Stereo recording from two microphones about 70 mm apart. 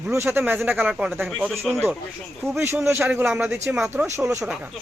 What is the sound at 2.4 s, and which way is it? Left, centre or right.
Speech, right.